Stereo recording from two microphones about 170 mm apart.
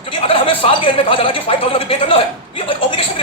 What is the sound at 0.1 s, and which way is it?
A man's voice, 30° left (ahead or behind).